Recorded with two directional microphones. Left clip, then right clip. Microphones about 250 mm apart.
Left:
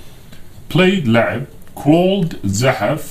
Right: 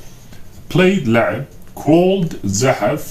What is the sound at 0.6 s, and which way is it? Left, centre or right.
Speech, left.